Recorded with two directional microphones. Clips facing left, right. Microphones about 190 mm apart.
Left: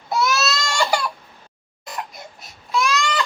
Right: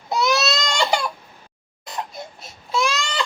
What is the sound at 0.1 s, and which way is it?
Baby cry, 20° right (ahead or behind).